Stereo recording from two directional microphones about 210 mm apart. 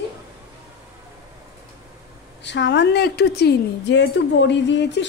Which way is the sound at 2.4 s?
55° left (ahead or behind).